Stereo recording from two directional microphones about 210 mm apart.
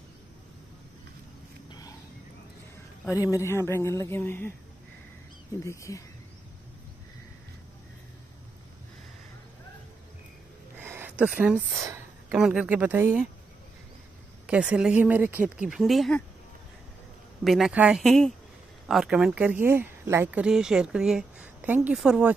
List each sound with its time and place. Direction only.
1.7 s a sound: 15° left (ahead or behind)
3.1 s a man's voice: 15° left (ahead or behind)
10.8 s speech: 10° right (ahead or behind)
14.4 s speech: 5° right (ahead or behind)
17.4 s speech: centre (ahead or behind)